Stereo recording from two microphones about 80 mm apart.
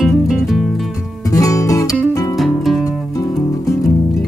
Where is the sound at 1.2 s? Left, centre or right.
Left.